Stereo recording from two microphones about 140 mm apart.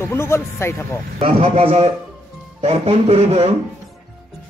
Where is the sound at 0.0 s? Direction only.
20° left (ahead or behind).